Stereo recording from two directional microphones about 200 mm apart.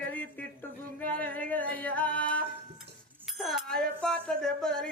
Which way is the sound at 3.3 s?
Centre (ahead or behind).